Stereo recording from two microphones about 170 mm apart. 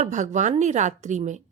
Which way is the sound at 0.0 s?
45° right (ahead or behind).